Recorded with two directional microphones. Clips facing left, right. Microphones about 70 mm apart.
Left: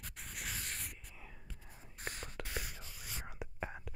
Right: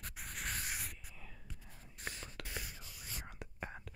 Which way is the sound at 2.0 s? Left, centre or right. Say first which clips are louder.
Left 1 dB; left.